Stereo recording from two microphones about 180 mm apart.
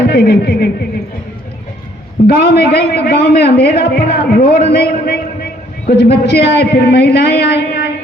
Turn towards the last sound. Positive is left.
turn(degrees=60)  # may be behind; listen again after turning